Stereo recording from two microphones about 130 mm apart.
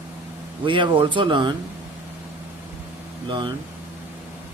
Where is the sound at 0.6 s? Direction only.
40° right (ahead or behind).